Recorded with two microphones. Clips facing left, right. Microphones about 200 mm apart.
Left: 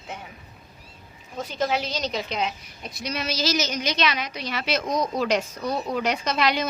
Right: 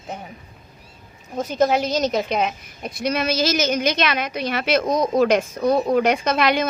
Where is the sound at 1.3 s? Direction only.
45° right (ahead or behind).